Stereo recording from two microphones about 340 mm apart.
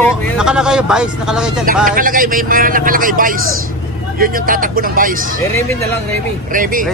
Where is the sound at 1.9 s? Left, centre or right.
Right.